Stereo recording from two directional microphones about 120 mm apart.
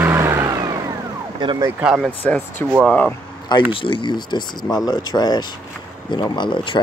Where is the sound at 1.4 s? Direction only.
40° right (ahead or behind).